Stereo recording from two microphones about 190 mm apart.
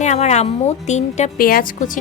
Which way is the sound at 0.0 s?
35° left (ahead or behind).